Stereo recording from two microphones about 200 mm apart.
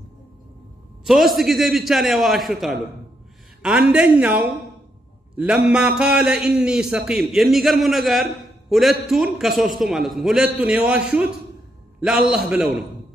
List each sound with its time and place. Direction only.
1.0 s a man's voice: centre (ahead or behind)